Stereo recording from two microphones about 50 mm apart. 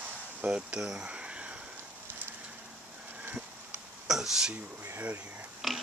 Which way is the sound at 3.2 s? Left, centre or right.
Right.